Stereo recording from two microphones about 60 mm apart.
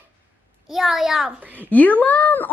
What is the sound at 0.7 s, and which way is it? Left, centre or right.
Speech, centre.